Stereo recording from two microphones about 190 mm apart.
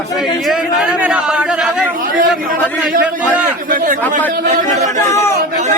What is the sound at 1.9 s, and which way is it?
Speech, 45° right (ahead or behind).